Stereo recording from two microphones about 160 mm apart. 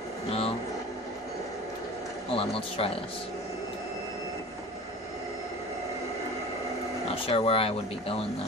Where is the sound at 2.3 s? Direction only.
35° left (ahead or behind).